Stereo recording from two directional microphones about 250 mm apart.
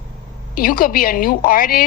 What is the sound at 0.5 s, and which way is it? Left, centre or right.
A woman's voice, left.